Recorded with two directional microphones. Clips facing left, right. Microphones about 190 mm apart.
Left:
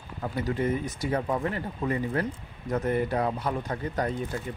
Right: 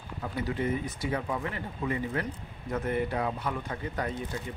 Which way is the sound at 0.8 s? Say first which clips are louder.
Left 3 dB; 40° left (ahead or behind).